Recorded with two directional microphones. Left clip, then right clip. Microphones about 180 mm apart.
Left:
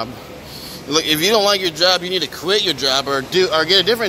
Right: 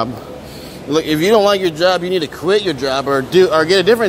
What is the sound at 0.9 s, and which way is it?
Speech, 25° right (ahead or behind).